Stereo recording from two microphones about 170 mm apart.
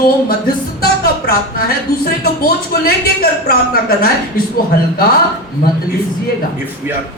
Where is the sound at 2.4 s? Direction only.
65° left (ahead or behind).